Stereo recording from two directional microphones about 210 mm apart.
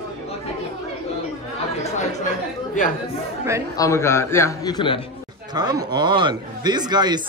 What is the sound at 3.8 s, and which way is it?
A man's voice, 15° left (ahead or behind).